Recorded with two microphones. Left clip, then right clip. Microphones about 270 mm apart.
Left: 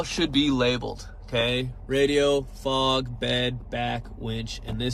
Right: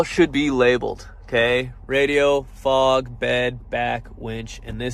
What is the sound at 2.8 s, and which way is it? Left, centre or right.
Speech, right.